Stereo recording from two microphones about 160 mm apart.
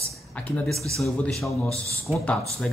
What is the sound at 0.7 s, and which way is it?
Speech, 20° right (ahead or behind).